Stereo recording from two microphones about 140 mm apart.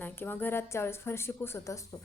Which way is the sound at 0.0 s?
15° left (ahead or behind).